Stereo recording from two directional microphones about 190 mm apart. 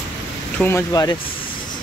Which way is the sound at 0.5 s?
10° left (ahead or behind).